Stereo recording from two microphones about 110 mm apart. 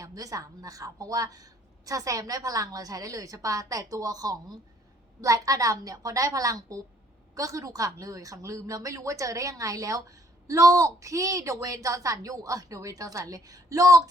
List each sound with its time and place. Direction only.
0.0 s a woman's voice: 30° right (ahead or behind)